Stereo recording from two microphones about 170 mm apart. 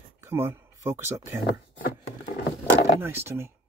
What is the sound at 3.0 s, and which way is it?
Speech, 15° right (ahead or behind).